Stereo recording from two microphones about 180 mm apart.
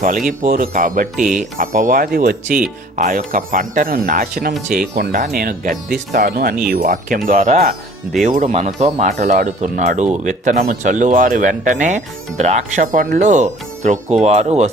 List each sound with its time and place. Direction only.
0.3 s speech: 50° right (ahead or behind)
1.1 s speech: centre (ahead or behind)
1.4 s speech: 50° right (ahead or behind)